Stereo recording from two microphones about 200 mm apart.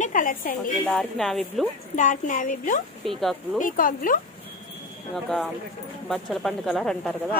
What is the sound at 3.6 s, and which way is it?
Speech, 45° left (ahead or behind).